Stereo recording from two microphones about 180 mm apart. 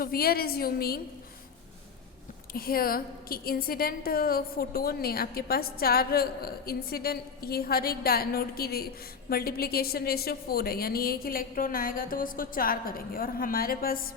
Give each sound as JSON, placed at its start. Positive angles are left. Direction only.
{"t": 0.0, "sound": "a woman's voice", "side_deg": 55}
{"t": 2.5, "sound": "a woman's voice", "side_deg": 55}